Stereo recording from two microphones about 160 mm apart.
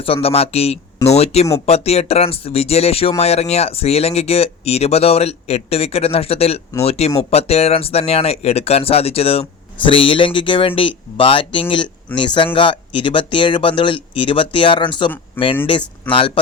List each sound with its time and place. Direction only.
0.0 s speech: 35° left (ahead or behind)